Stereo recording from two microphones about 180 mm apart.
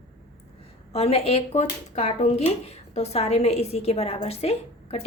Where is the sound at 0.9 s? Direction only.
35° left (ahead or behind).